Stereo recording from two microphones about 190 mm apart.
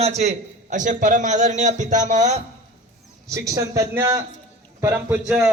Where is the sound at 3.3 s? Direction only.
15° right (ahead or behind).